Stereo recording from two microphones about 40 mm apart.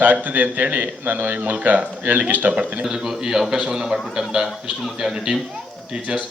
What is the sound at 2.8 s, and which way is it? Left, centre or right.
A man's voice, centre.